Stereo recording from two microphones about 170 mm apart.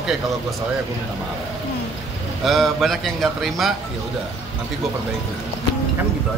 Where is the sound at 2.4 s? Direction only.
Centre (ahead or behind).